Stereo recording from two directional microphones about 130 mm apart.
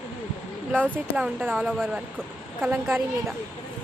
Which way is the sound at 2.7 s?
20° right (ahead or behind).